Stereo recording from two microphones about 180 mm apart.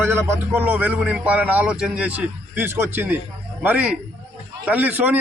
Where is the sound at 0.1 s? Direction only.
10° right (ahead or behind).